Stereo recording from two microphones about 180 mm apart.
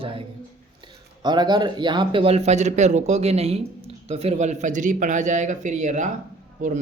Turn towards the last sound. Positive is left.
turn(degrees=-45)  # may be behind; listen again after turning